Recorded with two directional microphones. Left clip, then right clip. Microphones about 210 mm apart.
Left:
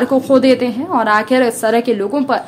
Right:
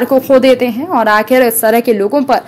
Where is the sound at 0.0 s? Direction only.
15° right (ahead or behind).